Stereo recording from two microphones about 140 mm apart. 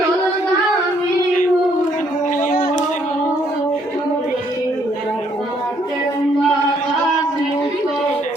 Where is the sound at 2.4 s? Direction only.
70° left (ahead or behind).